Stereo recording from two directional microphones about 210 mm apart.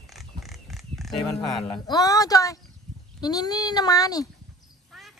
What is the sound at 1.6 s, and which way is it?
Speech, 20° left (ahead or behind).